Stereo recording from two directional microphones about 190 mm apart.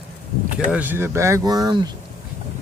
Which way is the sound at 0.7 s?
10° right (ahead or behind).